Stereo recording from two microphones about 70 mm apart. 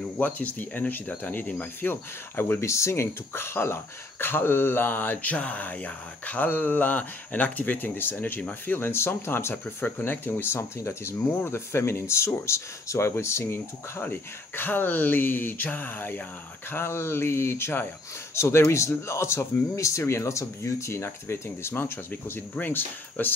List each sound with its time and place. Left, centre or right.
0.2 s speech: left
8.7 s speech: left